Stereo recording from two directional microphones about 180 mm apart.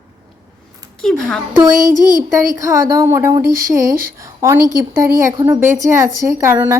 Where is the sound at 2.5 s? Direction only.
20° right (ahead or behind).